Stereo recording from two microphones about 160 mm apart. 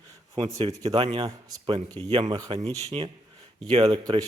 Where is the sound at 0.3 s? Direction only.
40° right (ahead or behind).